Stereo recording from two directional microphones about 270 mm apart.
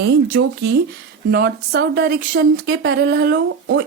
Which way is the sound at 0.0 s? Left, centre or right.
Right.